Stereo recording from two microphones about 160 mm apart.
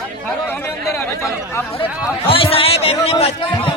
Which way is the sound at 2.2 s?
35° left (ahead or behind).